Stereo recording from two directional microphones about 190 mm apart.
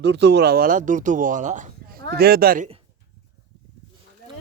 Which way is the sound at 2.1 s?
55° right (ahead or behind).